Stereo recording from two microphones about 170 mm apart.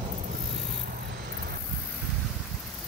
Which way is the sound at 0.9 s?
60° right (ahead or behind).